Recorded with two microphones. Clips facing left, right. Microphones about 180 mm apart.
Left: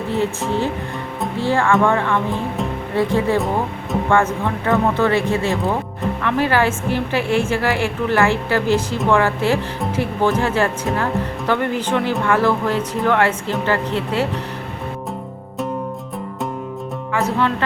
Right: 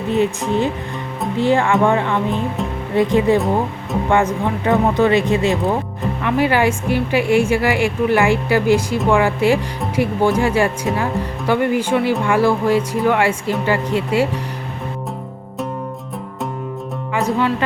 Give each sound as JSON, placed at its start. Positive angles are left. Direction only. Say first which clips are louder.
{"t": 0.1, "sound": "a woman's voice", "louder": "right 4 dB", "side_deg": -15}
{"t": 17.2, "sound": "speech", "louder": "right 1 dB", "side_deg": -15}